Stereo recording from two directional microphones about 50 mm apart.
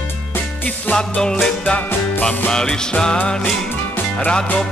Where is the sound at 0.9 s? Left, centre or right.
Centre.